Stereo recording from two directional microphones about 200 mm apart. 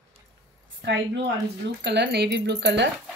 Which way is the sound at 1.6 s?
60° right (ahead or behind).